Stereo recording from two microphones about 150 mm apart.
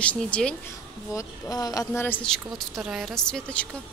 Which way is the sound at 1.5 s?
25° left (ahead or behind).